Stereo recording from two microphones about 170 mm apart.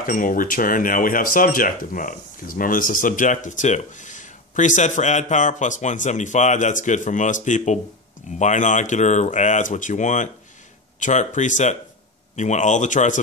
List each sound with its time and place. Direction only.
0.0 s speech: 55° left (ahead or behind)